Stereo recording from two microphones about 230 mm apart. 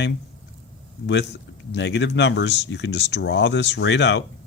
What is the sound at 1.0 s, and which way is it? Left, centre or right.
Speech, left.